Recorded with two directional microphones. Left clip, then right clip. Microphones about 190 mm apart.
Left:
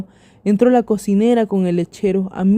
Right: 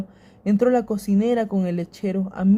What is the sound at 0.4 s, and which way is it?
Speech, 45° left (ahead or behind).